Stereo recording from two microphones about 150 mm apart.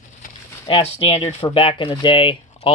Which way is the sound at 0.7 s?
40° left (ahead or behind).